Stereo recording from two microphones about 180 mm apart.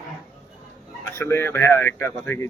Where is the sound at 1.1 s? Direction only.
15° left (ahead or behind).